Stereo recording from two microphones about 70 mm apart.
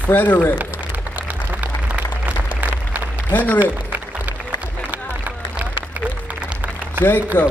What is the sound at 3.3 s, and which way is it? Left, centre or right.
Speech, left.